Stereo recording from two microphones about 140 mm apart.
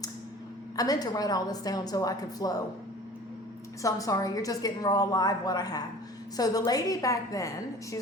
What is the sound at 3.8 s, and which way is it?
Speech, 25° left (ahead or behind).